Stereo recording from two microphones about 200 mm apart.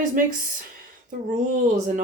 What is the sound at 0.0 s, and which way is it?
Speech, 40° right (ahead or behind).